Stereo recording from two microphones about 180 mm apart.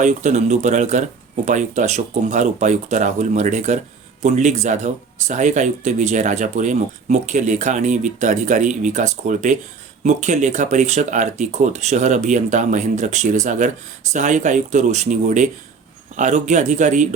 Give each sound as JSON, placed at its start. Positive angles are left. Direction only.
{"t": 0.0, "sound": "speech", "side_deg": -40}